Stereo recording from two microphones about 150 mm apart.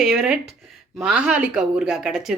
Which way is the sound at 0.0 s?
5° right (ahead or behind).